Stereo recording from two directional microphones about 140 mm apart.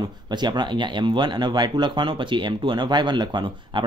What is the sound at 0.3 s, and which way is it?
Speech, 30° right (ahead or behind).